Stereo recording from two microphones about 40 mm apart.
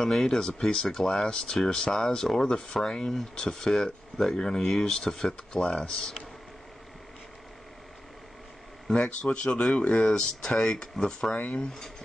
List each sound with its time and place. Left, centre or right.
0.0 s speech: centre
5.5 s speech: left
5.9 s speech: centre
8.8 s speech: centre
10.1 s speech: centre